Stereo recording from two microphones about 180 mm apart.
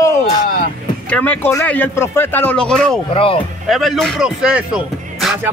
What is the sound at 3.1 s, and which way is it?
Speech, 30° left (ahead or behind).